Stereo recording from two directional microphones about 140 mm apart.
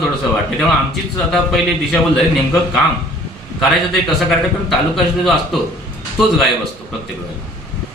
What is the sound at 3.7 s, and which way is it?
Speech, centre (ahead or behind).